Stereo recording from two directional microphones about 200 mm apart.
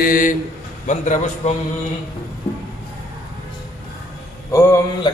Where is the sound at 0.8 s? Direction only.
35° left (ahead or behind).